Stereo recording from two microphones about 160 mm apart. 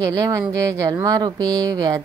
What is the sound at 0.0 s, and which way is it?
A woman's voice, 20° right (ahead or behind).